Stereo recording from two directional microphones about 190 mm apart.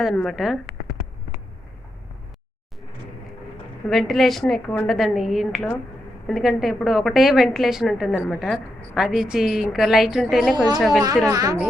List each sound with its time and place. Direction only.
0.0 s a woman's voice: centre (ahead or behind)
3.8 s a woman's voice: centre (ahead or behind)
10.5 s a woman's voice: 20° right (ahead or behind)
10.8 s a woman's voice: centre (ahead or behind)
11.3 s a woman's voice: 20° right (ahead or behind)